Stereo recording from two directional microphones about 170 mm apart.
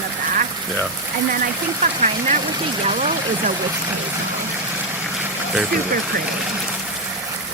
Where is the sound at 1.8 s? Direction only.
45° right (ahead or behind).